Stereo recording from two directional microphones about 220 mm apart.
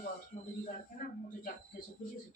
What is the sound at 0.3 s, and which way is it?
Speech, 30° left (ahead or behind).